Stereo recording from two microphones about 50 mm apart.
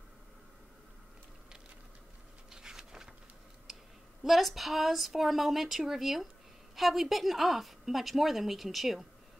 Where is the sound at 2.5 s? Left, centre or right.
Centre.